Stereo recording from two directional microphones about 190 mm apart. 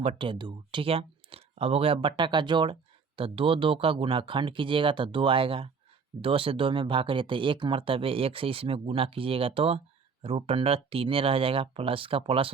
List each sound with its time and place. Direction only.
0.0 s speech: 30° right (ahead or behind)